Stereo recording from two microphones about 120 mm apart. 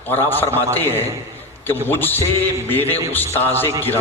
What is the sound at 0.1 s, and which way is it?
A man's voice, 15° left (ahead or behind).